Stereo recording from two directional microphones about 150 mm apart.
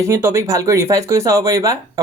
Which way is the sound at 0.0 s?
15° right (ahead or behind).